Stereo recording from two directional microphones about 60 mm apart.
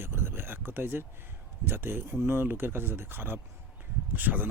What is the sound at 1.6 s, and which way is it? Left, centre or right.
Speech, right.